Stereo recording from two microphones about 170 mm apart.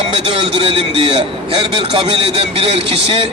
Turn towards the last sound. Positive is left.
turn(degrees=-35)  # may be behind; listen again after turning